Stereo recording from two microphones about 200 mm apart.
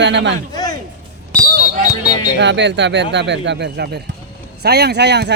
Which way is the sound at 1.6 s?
40° right (ahead or behind).